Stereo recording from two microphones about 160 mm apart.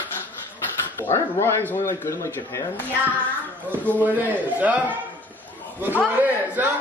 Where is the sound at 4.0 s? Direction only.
10° right (ahead or behind).